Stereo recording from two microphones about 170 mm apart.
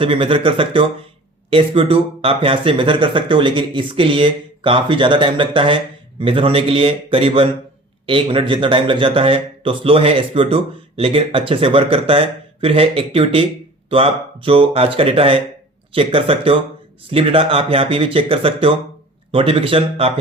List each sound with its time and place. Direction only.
0.0 s speech: 30° right (ahead or behind)